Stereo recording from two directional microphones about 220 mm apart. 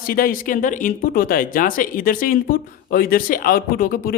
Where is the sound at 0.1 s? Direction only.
40° left (ahead or behind).